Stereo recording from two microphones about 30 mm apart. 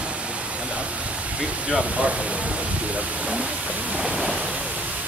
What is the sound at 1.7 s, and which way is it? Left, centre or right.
Speech, right.